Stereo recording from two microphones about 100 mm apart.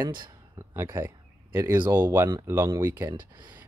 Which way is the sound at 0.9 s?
25° right (ahead or behind).